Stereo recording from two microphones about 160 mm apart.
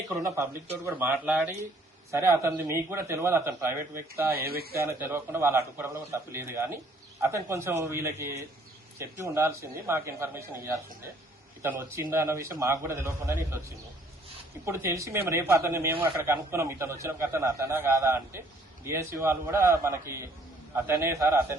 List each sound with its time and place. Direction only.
0.1 s a man's voice: 15° right (ahead or behind)
4.4 s speech: 70° right (ahead or behind)
4.8 s a man's voice: 15° right (ahead or behind)
11.8 s a man's voice: 15° right (ahead or behind)